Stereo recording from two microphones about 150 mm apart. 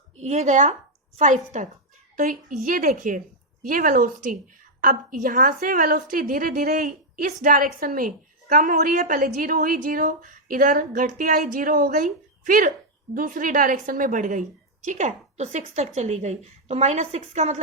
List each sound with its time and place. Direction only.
0.2 s a woman's voice: 50° right (ahead or behind)
2.1 s a woman's voice: 65° right (ahead or behind); by 17.6 s 45° right (ahead or behind)